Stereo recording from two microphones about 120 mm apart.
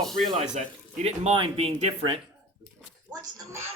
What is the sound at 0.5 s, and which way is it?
Speech, 65° right (ahead or behind).